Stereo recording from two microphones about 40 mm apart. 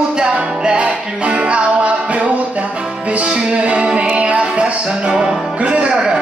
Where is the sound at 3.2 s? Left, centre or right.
Centre.